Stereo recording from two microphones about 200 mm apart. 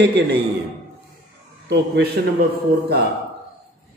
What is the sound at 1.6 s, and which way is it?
Speech, 60° right (ahead or behind).